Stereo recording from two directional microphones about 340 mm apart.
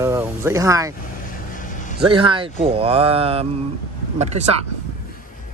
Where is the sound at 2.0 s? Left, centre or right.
Centre.